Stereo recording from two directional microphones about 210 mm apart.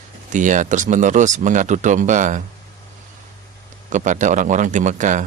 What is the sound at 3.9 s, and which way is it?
Speech, 35° right (ahead or behind).